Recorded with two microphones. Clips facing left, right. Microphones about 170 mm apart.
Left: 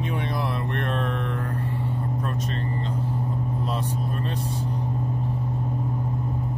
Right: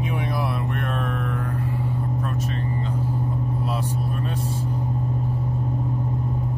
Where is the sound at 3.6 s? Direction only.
5° right (ahead or behind).